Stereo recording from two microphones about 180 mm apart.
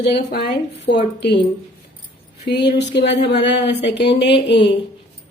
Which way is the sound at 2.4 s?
70° left (ahead or behind).